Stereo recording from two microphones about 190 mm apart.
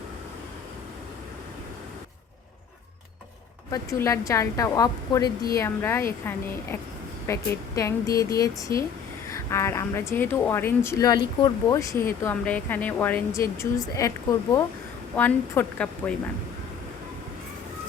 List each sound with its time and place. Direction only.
3.7 s a woman's voice: 15° left (ahead or behind)
15.1 s a woman's voice: 10° left (ahead or behind)